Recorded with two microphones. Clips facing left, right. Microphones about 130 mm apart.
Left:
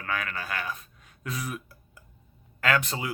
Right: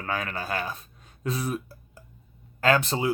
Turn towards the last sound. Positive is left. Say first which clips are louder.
# right 5 dB
turn(degrees=-30)  # may be behind; listen again after turning